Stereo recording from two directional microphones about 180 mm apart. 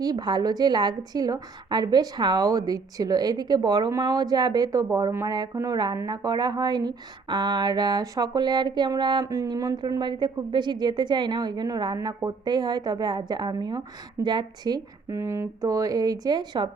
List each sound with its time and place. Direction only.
0.0 s a woman's voice: 20° right (ahead or behind)